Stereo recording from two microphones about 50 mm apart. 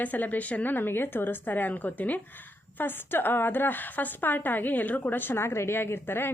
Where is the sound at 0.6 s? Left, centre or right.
Left.